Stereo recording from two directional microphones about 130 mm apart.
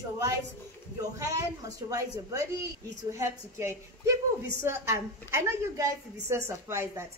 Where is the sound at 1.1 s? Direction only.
25° right (ahead or behind).